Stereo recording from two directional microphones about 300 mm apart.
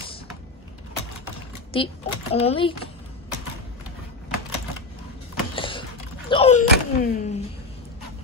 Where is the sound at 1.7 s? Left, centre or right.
Centre.